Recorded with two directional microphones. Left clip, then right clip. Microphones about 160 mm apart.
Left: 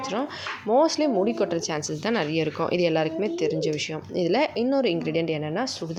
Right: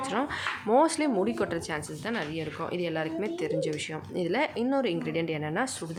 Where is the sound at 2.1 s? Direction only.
40° left (ahead or behind).